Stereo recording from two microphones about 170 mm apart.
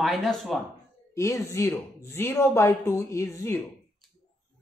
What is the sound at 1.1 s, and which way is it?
Speech, 15° left (ahead or behind).